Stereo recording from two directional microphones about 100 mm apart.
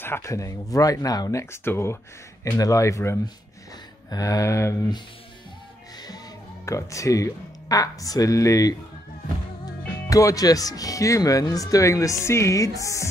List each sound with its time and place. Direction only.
0.0 s speech: 25° left (ahead or behind)
1.4 s speech: 25° left (ahead or behind)
2.5 s speech: 35° left (ahead or behind)
6.0 s speech: 35° left (ahead or behind)
10.0 s speech: 35° left (ahead or behind)